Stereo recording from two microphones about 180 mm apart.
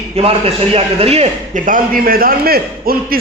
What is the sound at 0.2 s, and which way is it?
A man's voice, 35° right (ahead or behind).